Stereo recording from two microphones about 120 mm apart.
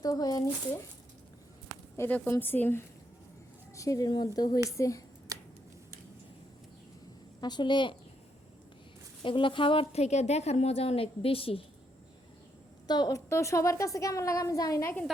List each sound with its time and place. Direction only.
0.0 s a woman's voice: 30° left (ahead or behind)
2.0 s speech: 15° left (ahead or behind)
3.8 s a woman's voice: 30° left (ahead or behind)
5.3 s a sound: 30° right (ahead or behind)
7.4 s a woman's voice: 40° left (ahead or behind)
9.2 s a woman's voice: 45° left (ahead or behind)
12.9 s a woman's voice: 30° left (ahead or behind)